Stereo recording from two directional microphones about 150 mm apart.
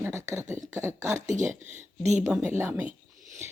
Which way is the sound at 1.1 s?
55° right (ahead or behind).